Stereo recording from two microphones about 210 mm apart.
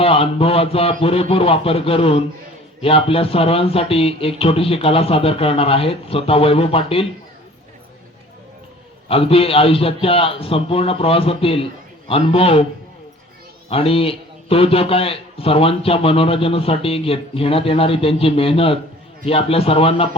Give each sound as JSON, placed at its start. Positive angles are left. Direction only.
{"t": 0.0, "sound": "a man's voice", "side_deg": 25}
{"t": 9.0, "sound": "a man's voice", "side_deg": 25}
{"t": 13.7, "sound": "a man's voice", "side_deg": 25}